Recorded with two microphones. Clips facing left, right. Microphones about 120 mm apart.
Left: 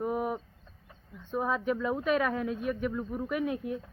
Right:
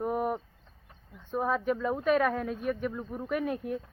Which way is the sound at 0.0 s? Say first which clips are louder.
Right 1 dB; centre (ahead or behind).